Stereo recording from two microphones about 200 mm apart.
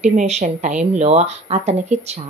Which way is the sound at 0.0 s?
35° right (ahead or behind).